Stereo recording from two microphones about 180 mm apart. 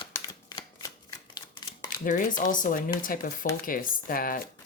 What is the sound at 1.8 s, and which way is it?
Speech, 45° left (ahead or behind).